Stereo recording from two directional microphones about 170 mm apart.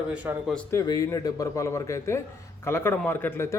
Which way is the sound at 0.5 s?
15° left (ahead or behind).